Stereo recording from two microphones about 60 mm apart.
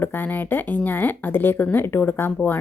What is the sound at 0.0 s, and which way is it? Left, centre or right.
A woman's voice, left.